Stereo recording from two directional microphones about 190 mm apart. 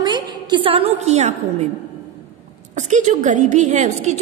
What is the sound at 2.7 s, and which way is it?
A woman's voice, 40° right (ahead or behind).